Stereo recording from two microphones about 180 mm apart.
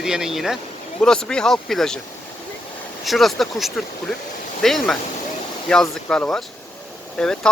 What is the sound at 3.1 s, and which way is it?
Speech, centre (ahead or behind).